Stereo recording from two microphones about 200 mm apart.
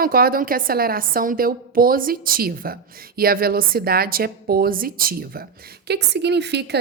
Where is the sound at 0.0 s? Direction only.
45° right (ahead or behind).